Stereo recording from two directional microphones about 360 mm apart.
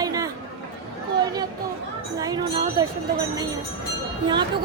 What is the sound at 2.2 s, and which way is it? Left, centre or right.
Music, centre.